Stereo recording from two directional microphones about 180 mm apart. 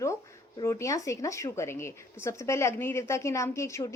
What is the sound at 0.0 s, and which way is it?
Speech, 15° left (ahead or behind).